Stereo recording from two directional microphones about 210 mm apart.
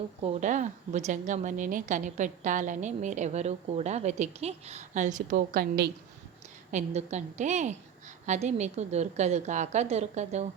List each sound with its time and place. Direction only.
0.2 s a woman's voice: 35° right (ahead or behind)
6.7 s a woman's voice: 35° right (ahead or behind)